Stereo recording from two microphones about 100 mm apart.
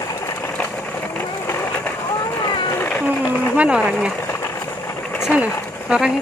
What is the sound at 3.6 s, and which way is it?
Speech, 10° right (ahead or behind).